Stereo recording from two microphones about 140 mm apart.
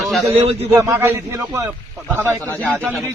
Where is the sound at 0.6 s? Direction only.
20° right (ahead or behind).